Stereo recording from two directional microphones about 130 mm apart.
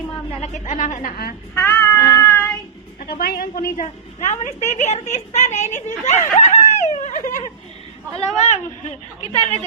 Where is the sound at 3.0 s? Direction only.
90° left.